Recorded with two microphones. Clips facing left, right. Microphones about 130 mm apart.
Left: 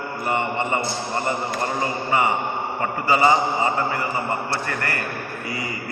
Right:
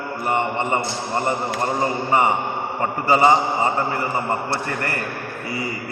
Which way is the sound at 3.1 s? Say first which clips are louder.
Right 2 dB; 30° right (ahead or behind).